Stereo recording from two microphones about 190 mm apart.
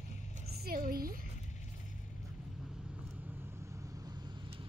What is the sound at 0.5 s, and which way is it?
Speech, 50° right (ahead or behind).